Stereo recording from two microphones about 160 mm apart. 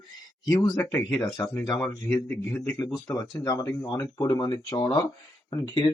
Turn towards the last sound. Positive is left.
turn(degrees=25)  # may be behind; listen again after turning